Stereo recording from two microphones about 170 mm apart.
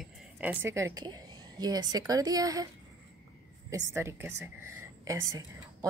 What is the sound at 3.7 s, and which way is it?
A woman's voice, 15° right (ahead or behind).